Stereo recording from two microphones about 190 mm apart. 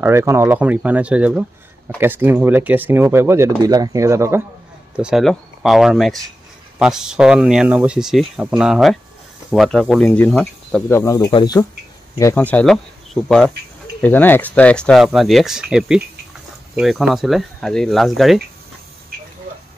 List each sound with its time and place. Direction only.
0.0 s speech: 15° right (ahead or behind)
4.9 s speech: 5° right (ahead or behind)